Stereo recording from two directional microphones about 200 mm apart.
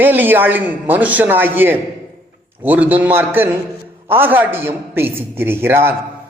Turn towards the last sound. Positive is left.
turn(degrees=-10)  # may be behind; listen again after turning